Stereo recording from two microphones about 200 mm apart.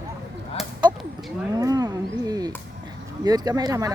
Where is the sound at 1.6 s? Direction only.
20° right (ahead or behind).